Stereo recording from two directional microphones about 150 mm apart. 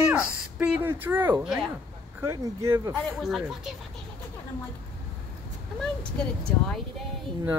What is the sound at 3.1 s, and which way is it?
Speech, centre (ahead or behind).